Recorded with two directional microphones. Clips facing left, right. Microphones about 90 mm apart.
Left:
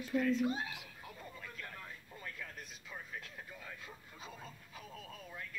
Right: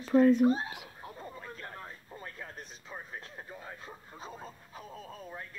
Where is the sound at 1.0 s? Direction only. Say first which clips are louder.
Right 7 dB; 35° right (ahead or behind).